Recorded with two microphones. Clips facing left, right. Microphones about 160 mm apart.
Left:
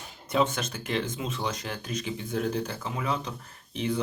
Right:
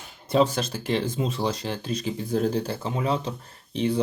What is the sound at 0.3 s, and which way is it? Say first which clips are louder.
Speech: right 5 dB; 35° right (ahead or behind).